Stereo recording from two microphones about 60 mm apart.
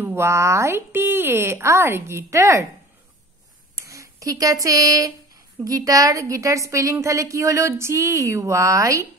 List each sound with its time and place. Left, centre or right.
0.1 s speech: right
3.8 s a woman's voice: right